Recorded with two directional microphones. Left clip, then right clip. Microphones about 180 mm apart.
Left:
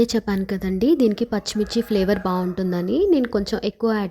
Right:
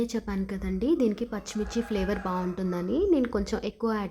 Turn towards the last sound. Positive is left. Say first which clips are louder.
# left 7 dB
turn(degrees=30)  # may be behind; listen again after turning